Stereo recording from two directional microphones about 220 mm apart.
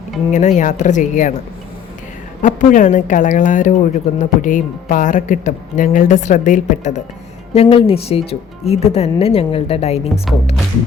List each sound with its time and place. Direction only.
0.3 s a woman's voice: 35° left (ahead or behind)
2.4 s a woman's voice: 35° left (ahead or behind)
10.3 s speech: centre (ahead or behind)